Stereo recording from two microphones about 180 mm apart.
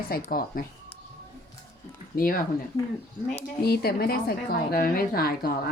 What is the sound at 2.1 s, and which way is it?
Speech, 50° left (ahead or behind).